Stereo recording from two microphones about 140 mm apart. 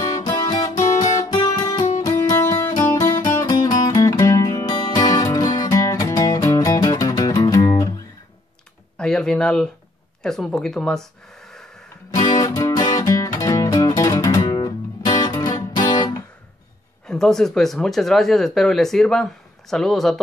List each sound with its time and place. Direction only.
0.1 s music: 30° left (ahead or behind)
1.1 s guitar: 25° left (ahead or behind)
2.0 s music: 20° left (ahead or behind)
8.9 s a sound: 5° left (ahead or behind)
10.2 s speech: 5° left (ahead or behind)
12.1 s music: 25° left (ahead or behind)
17.0 s speech: 5° left (ahead or behind)